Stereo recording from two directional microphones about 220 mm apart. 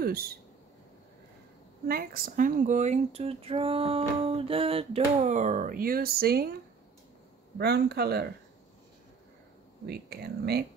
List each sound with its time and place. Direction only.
0.0 s speech: 45° right (ahead or behind)
1.9 s speech: 40° right (ahead or behind)
7.5 s speech: 50° right (ahead or behind)
9.8 s speech: 45° right (ahead or behind)